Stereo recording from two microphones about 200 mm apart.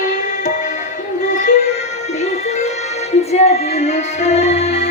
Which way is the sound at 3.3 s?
30° left (ahead or behind).